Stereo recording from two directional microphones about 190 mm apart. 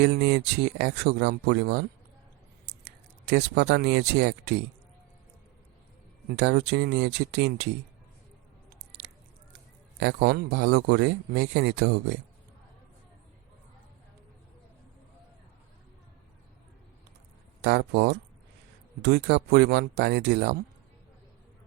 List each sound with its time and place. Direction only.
0.0 s speech: 60° right (ahead or behind)
6.3 s speech: 60° right (ahead or behind)
10.0 s speech: 60° right (ahead or behind)
17.6 s speech: 60° right (ahead or behind)